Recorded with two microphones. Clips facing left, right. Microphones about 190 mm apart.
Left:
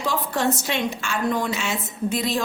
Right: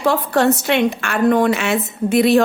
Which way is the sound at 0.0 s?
65° right (ahead or behind).